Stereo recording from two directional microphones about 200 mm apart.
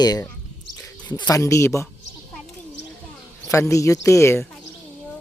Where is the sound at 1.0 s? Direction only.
20° left (ahead or behind).